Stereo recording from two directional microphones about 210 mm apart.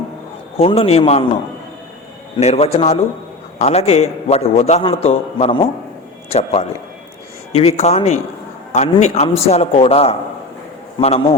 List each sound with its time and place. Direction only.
0.5 s a man's voice: 25° left (ahead or behind)
2.4 s a man's voice: 30° left (ahead or behind)